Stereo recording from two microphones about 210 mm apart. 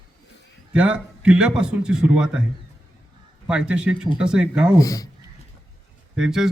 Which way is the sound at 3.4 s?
5° right (ahead or behind).